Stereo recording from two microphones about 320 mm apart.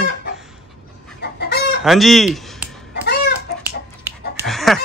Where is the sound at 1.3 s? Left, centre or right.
Left.